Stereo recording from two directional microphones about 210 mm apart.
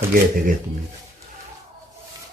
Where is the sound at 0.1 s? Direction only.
40° right (ahead or behind).